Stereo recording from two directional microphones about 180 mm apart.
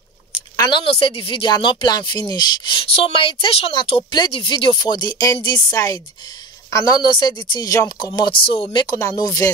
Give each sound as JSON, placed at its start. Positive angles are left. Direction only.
{"t": 0.6, "sound": "speech", "side_deg": 25}